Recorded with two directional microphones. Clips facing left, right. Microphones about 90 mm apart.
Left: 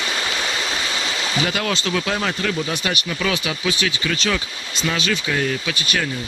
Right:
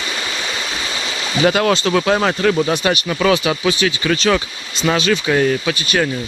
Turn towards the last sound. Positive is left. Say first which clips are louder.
# right 6 dB
turn(degrees=-45)  # may be behind; listen again after turning